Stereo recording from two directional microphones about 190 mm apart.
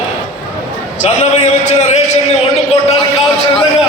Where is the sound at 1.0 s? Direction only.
35° left (ahead or behind).